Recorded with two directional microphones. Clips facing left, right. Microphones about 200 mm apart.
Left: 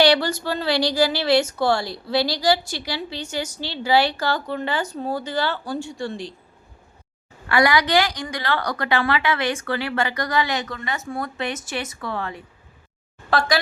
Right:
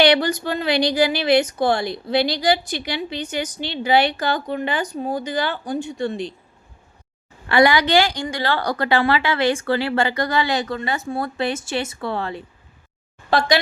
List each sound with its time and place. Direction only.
0.0 s a woman's voice: 20° right (ahead or behind)
7.4 s a woman's voice: 25° right (ahead or behind)